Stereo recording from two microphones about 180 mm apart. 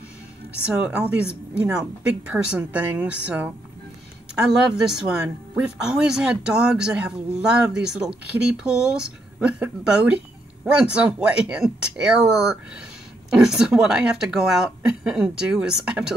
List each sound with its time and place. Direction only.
0.5 s a woman's voice: 5° right (ahead or behind)